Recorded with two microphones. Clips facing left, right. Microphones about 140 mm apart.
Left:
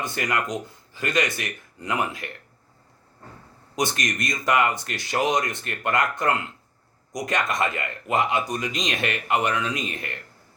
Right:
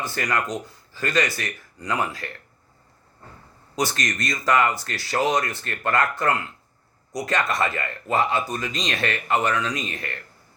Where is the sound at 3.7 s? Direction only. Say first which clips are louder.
Even; 20° left (ahead or behind).